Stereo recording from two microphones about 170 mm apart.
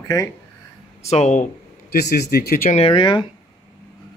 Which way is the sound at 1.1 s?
45° left (ahead or behind).